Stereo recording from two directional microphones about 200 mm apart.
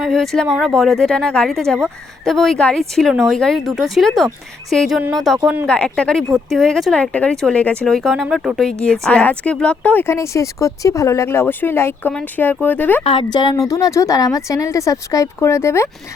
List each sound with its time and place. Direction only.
0.0 s speech: centre (ahead or behind)
5.4 s speech: 10° right (ahead or behind)
5.6 s speech: 5° left (ahead or behind)
13.1 s speech: 25° left (ahead or behind)